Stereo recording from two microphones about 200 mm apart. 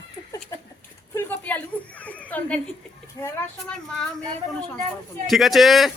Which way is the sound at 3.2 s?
15° left (ahead or behind).